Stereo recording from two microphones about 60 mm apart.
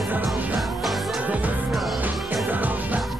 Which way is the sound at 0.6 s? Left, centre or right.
Centre.